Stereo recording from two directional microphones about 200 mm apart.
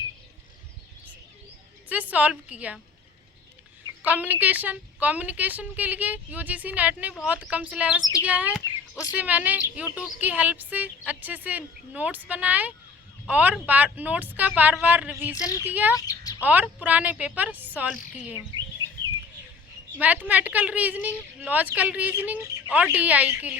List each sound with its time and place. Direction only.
1.9 s a woman's voice: 5° right (ahead or behind)
4.0 s a woman's voice: 10° right (ahead or behind)
15.4 s a child's voice: 15° left (ahead or behind)
15.6 s a woman's voice: 10° right (ahead or behind)
16.0 s chirp: 20° left (ahead or behind)
16.4 s a woman's voice: 10° right (ahead or behind)
20.0 s a woman's voice: 10° right (ahead or behind)